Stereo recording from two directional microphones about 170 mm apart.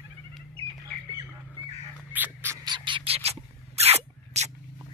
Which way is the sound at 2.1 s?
10° right (ahead or behind).